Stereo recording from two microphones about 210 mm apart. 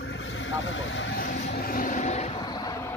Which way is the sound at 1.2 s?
45° left (ahead or behind).